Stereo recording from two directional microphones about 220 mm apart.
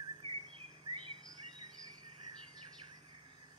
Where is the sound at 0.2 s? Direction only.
25° right (ahead or behind).